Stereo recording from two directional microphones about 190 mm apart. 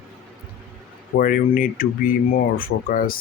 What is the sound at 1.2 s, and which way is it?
Speech, 45° left (ahead or behind).